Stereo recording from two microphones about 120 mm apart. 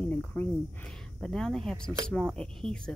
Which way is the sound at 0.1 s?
10° left (ahead or behind).